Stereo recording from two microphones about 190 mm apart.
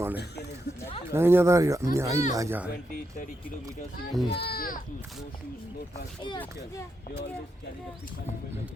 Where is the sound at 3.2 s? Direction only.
40° left (ahead or behind).